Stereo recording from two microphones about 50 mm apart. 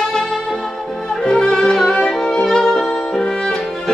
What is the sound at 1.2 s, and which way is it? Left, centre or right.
Music, centre.